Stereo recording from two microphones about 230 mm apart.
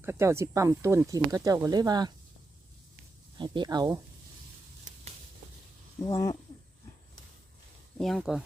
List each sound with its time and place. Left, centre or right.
0.0 s speech: centre
3.3 s speech: centre
6.1 s speech: centre
7.9 s speech: centre